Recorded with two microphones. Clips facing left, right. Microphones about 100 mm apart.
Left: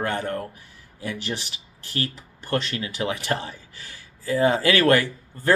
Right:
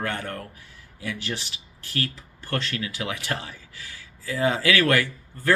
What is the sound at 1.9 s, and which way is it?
Speech, 20° left (ahead or behind).